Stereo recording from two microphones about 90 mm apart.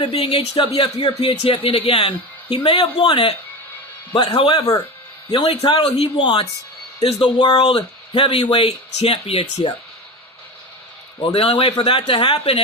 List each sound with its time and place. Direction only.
0.0 s speech: 90° left; by 4.6 s 70° left (ahead or behind)
5.3 s speech: 85° left
7.0 s speech: 90° left
7.7 s speech: 75° left (ahead or behind)
11.2 s speech: 85° left